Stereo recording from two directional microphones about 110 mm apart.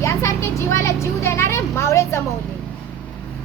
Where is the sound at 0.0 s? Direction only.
25° left (ahead or behind).